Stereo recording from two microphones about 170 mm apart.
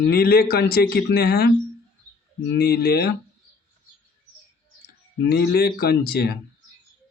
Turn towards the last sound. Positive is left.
turn(degrees=65)  # may be behind; listen again after turning